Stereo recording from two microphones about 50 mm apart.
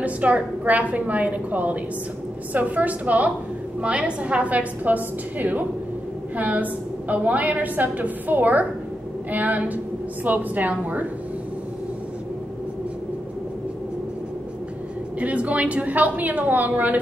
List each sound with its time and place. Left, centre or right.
0.0 s a woman's voice: right
15.1 s a woman's voice: right